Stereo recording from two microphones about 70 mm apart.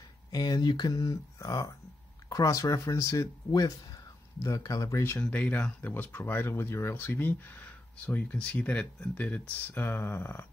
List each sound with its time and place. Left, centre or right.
0.3 s speech: left
5.2 s speech: left